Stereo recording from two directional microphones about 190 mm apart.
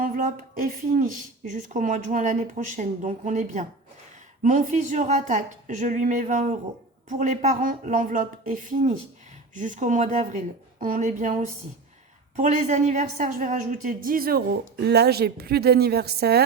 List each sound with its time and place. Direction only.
0.0 s a woman's voice: 45° right (ahead or behind)